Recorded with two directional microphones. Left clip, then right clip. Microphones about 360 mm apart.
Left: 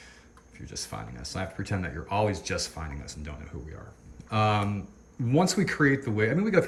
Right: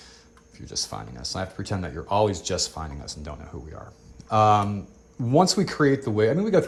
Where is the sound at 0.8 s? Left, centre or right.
Centre.